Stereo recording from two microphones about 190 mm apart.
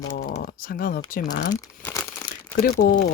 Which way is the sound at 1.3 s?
45° left (ahead or behind).